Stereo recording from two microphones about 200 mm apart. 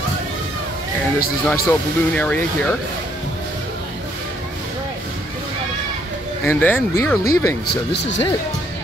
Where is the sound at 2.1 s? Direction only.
5° left (ahead or behind).